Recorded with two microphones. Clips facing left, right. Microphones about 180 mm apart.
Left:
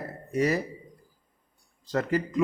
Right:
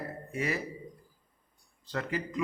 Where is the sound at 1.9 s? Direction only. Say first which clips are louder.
Left 7 dB; 45° left (ahead or behind).